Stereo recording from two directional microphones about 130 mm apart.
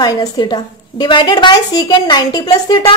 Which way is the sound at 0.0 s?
30° left (ahead or behind).